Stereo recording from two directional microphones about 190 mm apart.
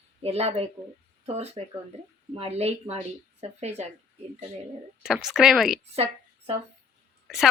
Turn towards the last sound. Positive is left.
turn(degrees=0)  # may be behind; listen again after turning